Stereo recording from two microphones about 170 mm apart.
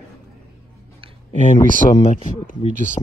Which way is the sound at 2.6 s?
45° right (ahead or behind).